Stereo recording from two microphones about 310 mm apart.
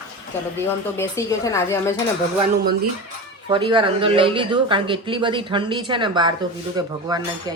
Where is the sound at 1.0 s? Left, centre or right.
Centre.